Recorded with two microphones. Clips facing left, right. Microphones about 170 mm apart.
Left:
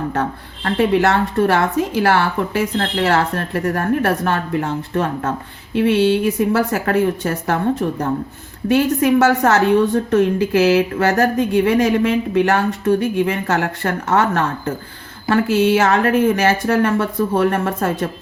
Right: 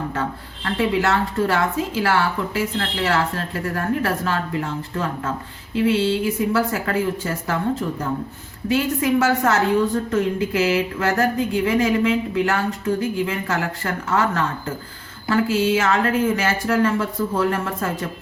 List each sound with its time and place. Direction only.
0.1 s a woman's voice: 60° left (ahead or behind)